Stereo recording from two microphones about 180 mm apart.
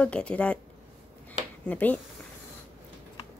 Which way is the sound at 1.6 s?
10° left (ahead or behind).